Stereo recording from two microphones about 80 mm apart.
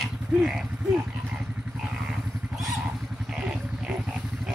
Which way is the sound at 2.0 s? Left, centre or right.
Centre.